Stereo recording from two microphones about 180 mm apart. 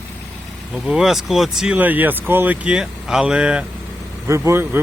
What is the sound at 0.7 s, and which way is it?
Speech, 5° right (ahead or behind).